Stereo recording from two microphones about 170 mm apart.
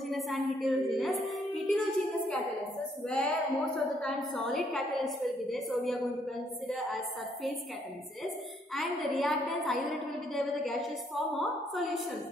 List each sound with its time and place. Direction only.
0.1 s a woman's voice: centre (ahead or behind)
1.2 s music: centre (ahead or behind)
3.1 s a woman's voice: 5° left (ahead or behind)
8.7 s a woman's voice: centre (ahead or behind)